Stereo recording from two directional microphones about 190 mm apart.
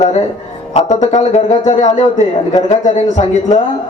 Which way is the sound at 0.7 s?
40° left (ahead or behind).